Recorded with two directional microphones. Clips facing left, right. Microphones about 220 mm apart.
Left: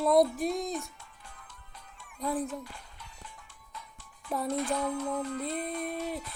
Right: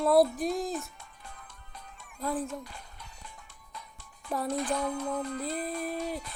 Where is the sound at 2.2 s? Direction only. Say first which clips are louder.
Left 1 dB; centre (ahead or behind).